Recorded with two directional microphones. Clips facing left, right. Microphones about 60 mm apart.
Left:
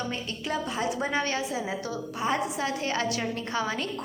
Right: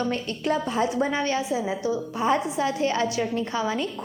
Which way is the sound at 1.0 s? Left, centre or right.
Left.